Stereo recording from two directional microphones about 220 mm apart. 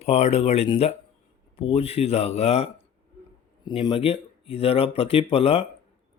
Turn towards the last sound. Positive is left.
turn(degrees=25)  # may be behind; listen again after turning